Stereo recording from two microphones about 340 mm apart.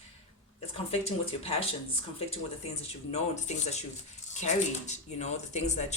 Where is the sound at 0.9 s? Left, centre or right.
Centre.